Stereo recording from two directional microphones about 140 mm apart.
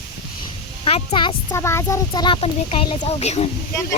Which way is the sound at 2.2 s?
40° left (ahead or behind).